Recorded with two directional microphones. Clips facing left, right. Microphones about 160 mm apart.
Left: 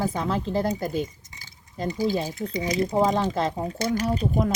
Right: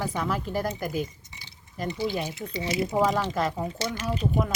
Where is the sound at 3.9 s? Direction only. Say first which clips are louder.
Left 5 dB; 40° left (ahead or behind).